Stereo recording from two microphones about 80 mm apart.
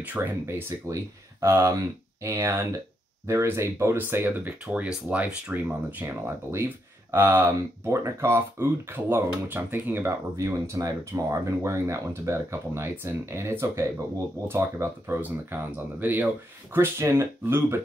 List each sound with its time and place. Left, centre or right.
0.0 s speech: right
6.0 s speech: right
10.3 s speech: right